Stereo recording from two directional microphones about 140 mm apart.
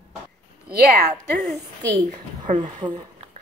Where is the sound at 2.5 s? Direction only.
60° right (ahead or behind).